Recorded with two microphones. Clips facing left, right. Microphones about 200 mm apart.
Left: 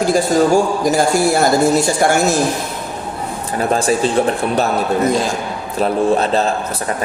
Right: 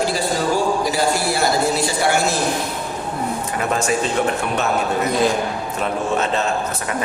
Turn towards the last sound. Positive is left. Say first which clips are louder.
# left 6 dB
turn(degrees=35)  # may be behind; listen again after turning